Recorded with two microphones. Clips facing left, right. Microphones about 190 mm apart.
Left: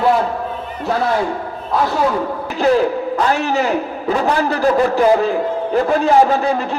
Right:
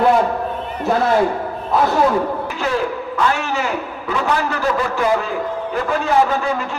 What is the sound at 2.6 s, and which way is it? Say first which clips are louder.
A man's voice: left 9 dB; 35° left (ahead or behind).